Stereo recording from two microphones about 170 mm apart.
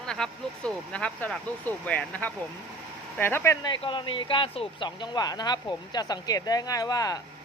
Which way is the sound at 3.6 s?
30° left (ahead or behind).